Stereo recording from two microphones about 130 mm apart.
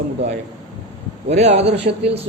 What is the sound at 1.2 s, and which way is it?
Speech, 55° right (ahead or behind).